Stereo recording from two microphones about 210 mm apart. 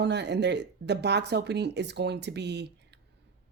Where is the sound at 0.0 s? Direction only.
55° right (ahead or behind).